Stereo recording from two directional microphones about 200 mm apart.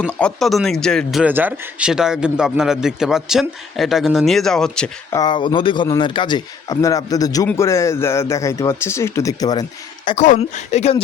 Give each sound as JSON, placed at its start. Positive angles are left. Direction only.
{"t": 0.1, "sound": "speech", "side_deg": 5}
{"t": 5.1, "sound": "a man's voice", "side_deg": 20}
{"t": 10.2, "sound": "speech", "side_deg": 40}